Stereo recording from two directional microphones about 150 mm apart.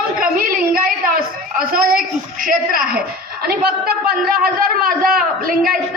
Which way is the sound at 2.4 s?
65° right (ahead or behind).